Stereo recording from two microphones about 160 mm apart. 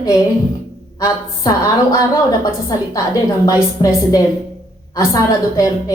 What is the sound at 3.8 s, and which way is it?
A woman's voice, 20° left (ahead or behind).